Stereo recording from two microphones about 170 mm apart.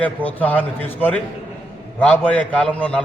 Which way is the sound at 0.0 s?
10° left (ahead or behind).